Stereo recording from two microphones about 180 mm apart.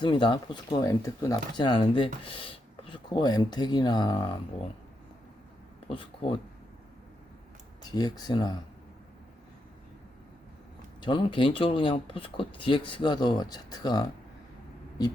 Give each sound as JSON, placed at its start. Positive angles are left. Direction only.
{"t": 0.0, "sound": "speech", "side_deg": 25}
{"t": 5.9, "sound": "speech", "side_deg": 30}
{"t": 7.8, "sound": "speech", "side_deg": 20}
{"t": 11.0, "sound": "speech", "side_deg": 25}